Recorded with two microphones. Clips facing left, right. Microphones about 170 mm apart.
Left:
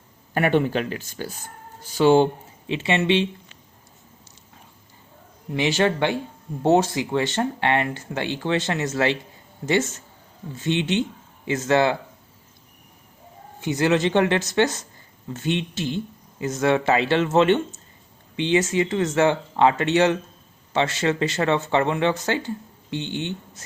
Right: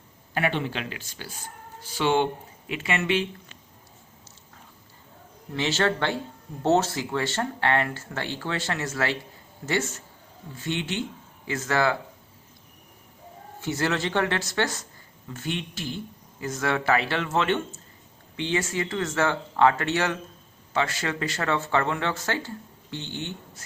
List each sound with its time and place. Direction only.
0.3 s speech: 50° left (ahead or behind); by 3.2 s 25° left (ahead or behind)
5.5 s speech: 15° left (ahead or behind)
13.6 s speech: 15° left (ahead or behind)